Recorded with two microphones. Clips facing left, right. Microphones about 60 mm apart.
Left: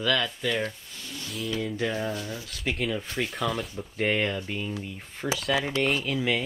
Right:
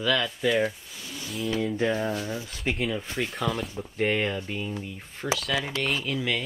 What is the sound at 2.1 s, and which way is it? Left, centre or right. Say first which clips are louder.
Speech: right 3 dB; right.